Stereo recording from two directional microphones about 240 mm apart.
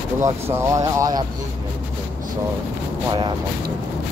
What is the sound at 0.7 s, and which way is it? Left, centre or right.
Speech, centre.